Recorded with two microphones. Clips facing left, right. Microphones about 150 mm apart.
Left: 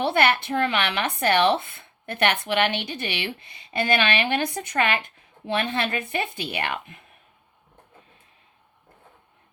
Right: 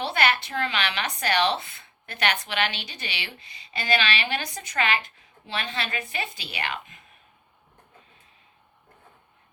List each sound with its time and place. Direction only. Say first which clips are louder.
0.0 s speech: left 4 dB; 55° left (ahead or behind)